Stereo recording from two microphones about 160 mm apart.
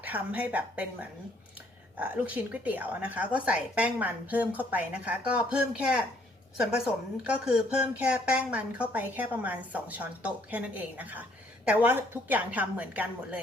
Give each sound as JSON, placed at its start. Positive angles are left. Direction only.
{"t": 0.0, "sound": "speech", "side_deg": -10}